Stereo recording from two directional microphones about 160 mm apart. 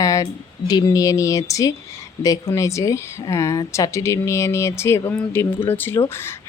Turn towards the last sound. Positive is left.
turn(degrees=15)  # may be behind; listen again after turning